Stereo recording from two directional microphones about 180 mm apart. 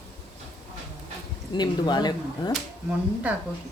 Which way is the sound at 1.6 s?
25° left (ahead or behind).